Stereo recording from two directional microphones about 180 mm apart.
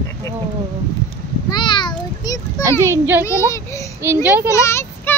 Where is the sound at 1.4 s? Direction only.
25° left (ahead or behind).